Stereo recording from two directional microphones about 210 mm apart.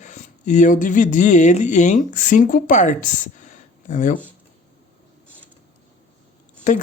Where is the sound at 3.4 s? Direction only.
35° left (ahead or behind).